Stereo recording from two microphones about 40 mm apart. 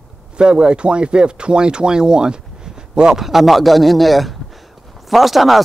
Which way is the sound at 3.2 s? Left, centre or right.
Centre.